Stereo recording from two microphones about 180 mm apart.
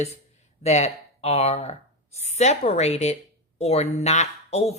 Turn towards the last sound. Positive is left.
turn(degrees=35)  # may be behind; listen again after turning